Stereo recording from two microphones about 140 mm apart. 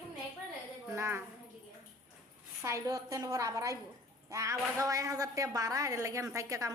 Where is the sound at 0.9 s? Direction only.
15° right (ahead or behind).